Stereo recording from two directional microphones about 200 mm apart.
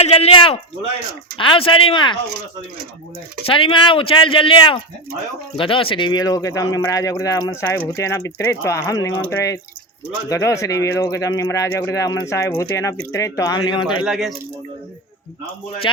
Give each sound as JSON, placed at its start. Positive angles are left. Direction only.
{"t": 0.0, "sound": "speech", "side_deg": 30}
{"t": 3.4, "sound": "speech", "side_deg": 25}
{"t": 14.0, "sound": "speech", "side_deg": 0}